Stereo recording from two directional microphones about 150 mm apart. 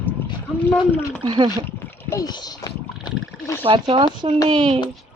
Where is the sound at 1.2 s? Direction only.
30° right (ahead or behind).